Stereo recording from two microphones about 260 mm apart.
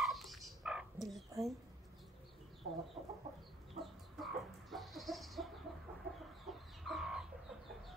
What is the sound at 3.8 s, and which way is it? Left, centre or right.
Chicken, centre.